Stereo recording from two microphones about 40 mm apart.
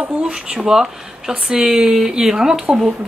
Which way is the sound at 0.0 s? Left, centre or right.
Right.